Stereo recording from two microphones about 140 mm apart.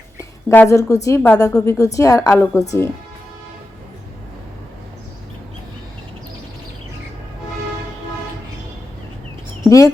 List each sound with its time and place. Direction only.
0.2 s a sound: 15° left (ahead or behind)
1.0 s a woman's voice: 15° left (ahead or behind)
9.6 s speech: 25° left (ahead or behind)